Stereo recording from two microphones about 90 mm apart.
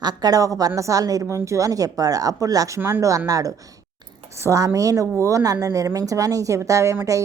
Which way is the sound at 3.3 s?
40° right (ahead or behind).